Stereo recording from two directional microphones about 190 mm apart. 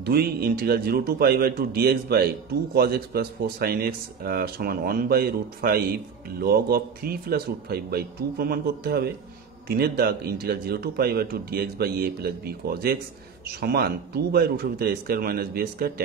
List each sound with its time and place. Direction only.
0.0 s a man's voice: 55° right (ahead or behind)